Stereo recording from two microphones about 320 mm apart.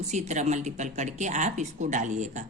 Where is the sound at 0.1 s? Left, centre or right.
Right.